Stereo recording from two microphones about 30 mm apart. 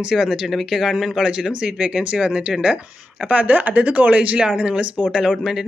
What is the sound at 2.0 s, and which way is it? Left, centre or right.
Speech, right.